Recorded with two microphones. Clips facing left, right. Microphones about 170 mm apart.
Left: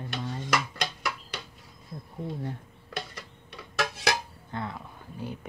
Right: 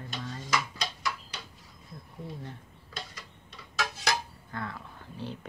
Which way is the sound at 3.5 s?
60° left (ahead or behind).